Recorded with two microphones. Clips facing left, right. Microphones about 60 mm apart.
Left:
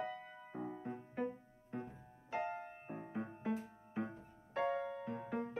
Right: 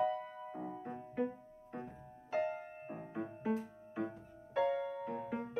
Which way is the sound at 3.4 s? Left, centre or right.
Right.